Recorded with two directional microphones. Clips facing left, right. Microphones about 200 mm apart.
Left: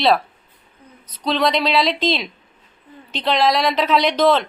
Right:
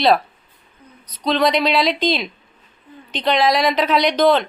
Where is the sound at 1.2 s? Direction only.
Centre (ahead or behind).